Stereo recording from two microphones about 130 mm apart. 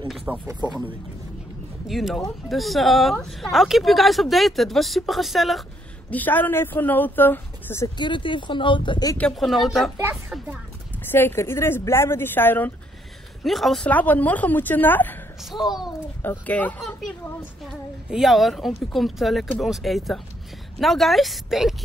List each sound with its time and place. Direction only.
0.5 s speech: 35° right (ahead or behind)
1.9 s speech: centre (ahead or behind)
6.0 s speech: 15° left (ahead or behind)
8.0 s speech: 40° left (ahead or behind)
9.2 s speech: centre (ahead or behind)
11.1 s speech: 15° left (ahead or behind)
13.4 s speech: centre (ahead or behind)
15.6 s speech: 5° right (ahead or behind)
16.2 s speech: 15° left (ahead or behind)
18.1 s speech: centre (ahead or behind)